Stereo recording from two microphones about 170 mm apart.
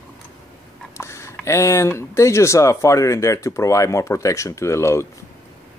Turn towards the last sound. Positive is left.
turn(degrees=15)  # may be behind; listen again after turning